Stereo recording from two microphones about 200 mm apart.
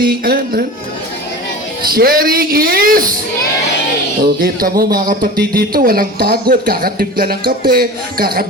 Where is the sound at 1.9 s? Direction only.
50° right (ahead or behind).